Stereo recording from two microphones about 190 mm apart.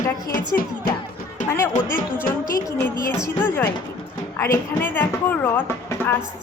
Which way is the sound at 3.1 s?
10° left (ahead or behind).